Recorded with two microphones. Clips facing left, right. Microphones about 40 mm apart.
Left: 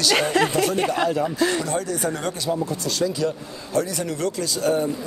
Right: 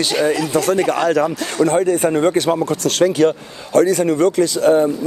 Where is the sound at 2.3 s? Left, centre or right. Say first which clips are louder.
Right 8 dB; right.